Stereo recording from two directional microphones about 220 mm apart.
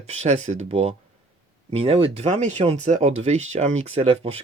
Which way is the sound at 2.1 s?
30° right (ahead or behind).